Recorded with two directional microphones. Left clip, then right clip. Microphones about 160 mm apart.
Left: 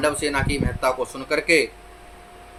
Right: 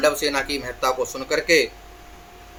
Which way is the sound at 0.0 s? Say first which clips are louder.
Right 2 dB; centre (ahead or behind).